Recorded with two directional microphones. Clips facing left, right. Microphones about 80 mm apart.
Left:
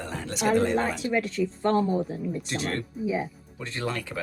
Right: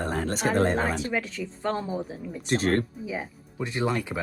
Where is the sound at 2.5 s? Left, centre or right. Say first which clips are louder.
Right 10 dB; right.